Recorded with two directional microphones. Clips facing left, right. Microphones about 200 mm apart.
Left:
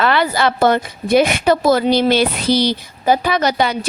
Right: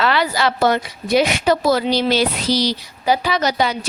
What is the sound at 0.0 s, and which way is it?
A woman's voice, 50° left (ahead or behind).